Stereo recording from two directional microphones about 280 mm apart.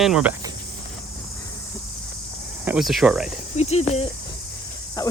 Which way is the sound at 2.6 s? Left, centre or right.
Centre.